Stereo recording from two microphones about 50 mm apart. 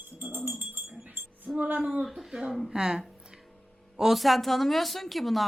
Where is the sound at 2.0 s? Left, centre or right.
Centre.